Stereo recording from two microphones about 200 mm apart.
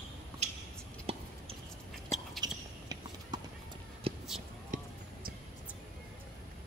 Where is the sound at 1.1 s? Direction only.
30° right (ahead or behind).